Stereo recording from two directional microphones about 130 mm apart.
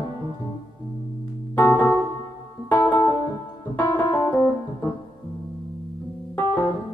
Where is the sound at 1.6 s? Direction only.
15° left (ahead or behind).